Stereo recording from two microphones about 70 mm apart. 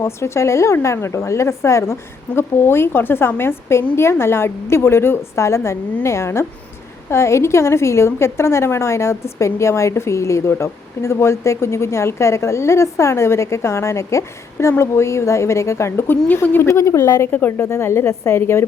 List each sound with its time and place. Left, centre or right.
0.0 s a woman's voice: left
16.6 s speech: left
17.3 s a woman's voice: left
17.7 s a woman's voice: left
18.1 s speech: left
18.3 s a woman's voice: left